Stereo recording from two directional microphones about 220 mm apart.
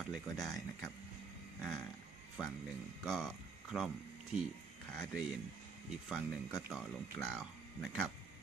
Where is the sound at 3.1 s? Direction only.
Centre (ahead or behind).